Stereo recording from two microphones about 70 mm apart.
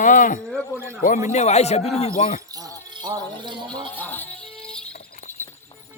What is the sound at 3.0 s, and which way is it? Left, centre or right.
Music, right.